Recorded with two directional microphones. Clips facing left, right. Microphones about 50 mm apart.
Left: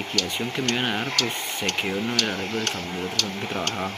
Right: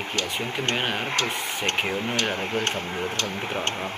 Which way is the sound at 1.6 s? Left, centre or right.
Right.